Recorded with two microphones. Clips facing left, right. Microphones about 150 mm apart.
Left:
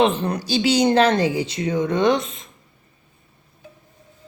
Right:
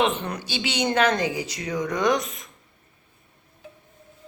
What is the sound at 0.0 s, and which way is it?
A woman's voice, 35° left (ahead or behind).